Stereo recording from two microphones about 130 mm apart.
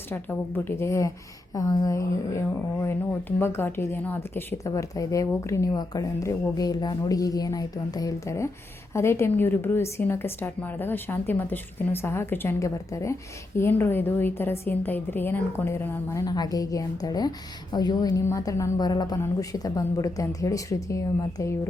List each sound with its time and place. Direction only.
0.1 s a woman's voice: 15° left (ahead or behind)
16.2 s speech: 30° left (ahead or behind)